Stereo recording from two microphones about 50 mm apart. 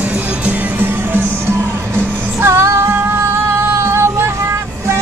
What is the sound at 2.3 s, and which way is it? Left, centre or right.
Music, right.